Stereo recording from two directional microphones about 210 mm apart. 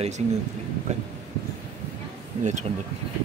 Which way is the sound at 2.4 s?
35° right (ahead or behind).